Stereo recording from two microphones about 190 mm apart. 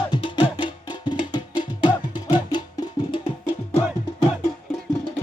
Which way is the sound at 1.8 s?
25° left (ahead or behind).